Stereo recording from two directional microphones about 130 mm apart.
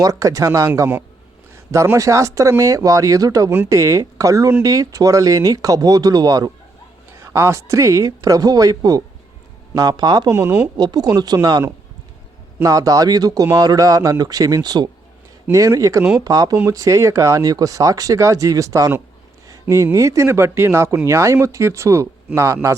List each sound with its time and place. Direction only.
0.0 s speech: 25° right (ahead or behind)
10.3 s speech: 20° right (ahead or behind)
10.8 s speech: 30° right (ahead or behind)